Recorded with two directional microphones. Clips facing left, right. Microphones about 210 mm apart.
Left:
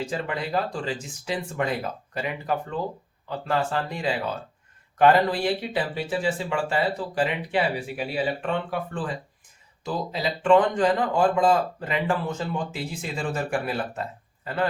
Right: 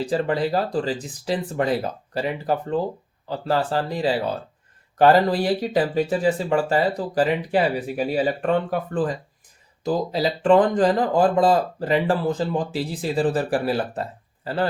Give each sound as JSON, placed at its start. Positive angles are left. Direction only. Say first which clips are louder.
{"t": 0.0, "sound": "speech", "louder": "right 7 dB", "side_deg": -35}